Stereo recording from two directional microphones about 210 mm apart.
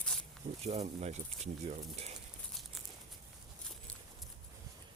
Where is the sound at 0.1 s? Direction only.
5° left (ahead or behind).